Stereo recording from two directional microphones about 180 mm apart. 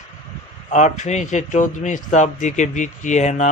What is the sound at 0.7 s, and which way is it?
A man's voice, 40° left (ahead or behind).